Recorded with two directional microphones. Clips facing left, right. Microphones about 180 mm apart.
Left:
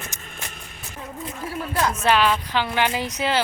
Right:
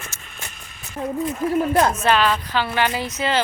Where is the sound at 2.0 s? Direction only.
10° left (ahead or behind).